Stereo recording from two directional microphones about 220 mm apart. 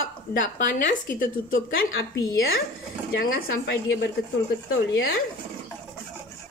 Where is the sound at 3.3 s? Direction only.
60° left (ahead or behind).